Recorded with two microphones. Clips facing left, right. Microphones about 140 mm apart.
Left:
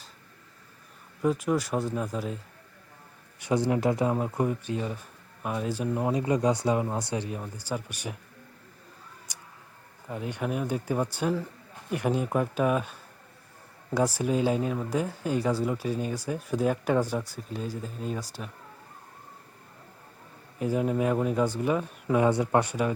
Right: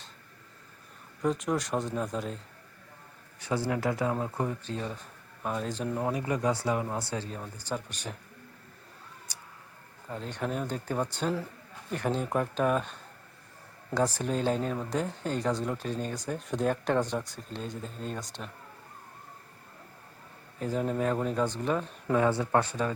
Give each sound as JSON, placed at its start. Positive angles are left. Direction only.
{"t": 1.2, "sound": "speech", "side_deg": 5}
{"t": 3.4, "sound": "speech", "side_deg": 20}
{"t": 6.1, "sound": "speech", "side_deg": 20}
{"t": 9.3, "sound": "a sound", "side_deg": 15}
{"t": 10.1, "sound": "speech", "side_deg": 10}
{"t": 20.6, "sound": "speech", "side_deg": 10}